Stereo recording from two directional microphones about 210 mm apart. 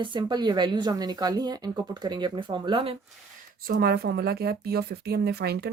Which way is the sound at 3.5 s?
45° right (ahead or behind).